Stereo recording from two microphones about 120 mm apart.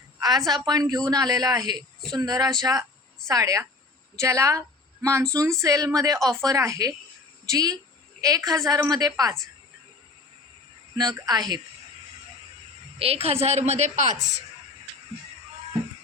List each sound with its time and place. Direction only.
0.2 s a woman's voice: 35° right (ahead or behind)
10.9 s a woman's voice: 35° right (ahead or behind)
13.0 s a woman's voice: 55° right (ahead or behind); by 14.2 s 90° right